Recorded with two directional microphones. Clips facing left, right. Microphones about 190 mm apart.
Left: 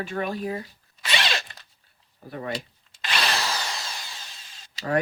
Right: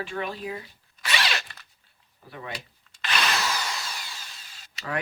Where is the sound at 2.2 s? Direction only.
45° left (ahead or behind).